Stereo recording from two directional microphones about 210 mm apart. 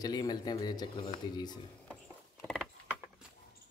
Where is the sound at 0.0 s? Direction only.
20° left (ahead or behind).